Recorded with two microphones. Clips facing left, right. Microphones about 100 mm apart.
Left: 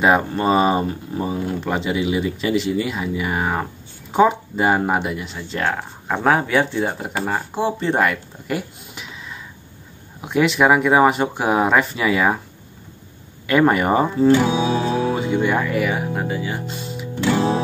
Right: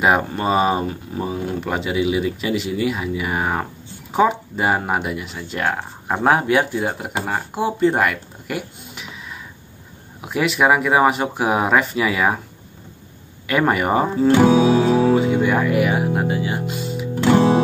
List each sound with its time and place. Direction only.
0.0 s speech: 5° right (ahead or behind)
13.5 s speech: 5° right (ahead or behind)
14.3 s music: 45° right (ahead or behind)
15.1 s speech: centre (ahead or behind); by 16.6 s 15° right (ahead or behind)
16.6 s music: centre (ahead or behind)
17.1 s music: 45° right (ahead or behind)